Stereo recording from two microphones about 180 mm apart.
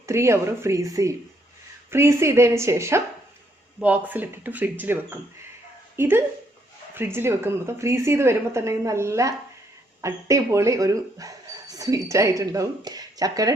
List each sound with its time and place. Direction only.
0.0 s a woman's voice: 15° right (ahead or behind)